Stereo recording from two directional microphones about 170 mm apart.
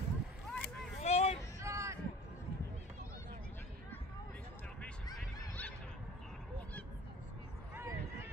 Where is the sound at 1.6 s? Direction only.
15° right (ahead or behind).